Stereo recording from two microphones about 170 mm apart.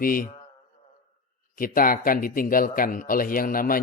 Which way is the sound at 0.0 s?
55° left (ahead or behind).